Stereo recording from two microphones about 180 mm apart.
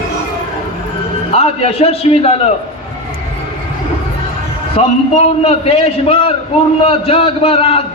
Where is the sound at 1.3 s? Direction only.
35° left (ahead or behind).